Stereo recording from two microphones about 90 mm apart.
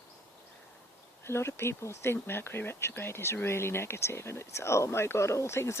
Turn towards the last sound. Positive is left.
turn(degrees=30)  # may be behind; listen again after turning